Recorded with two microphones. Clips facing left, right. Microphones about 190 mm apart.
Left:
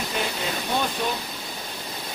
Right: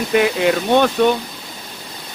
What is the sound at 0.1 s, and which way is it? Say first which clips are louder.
Speech: right 17 dB; 75° right (ahead or behind).